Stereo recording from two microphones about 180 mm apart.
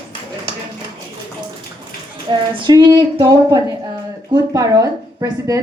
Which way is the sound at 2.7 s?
25° right (ahead or behind).